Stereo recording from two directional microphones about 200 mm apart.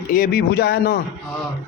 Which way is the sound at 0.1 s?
45° left (ahead or behind).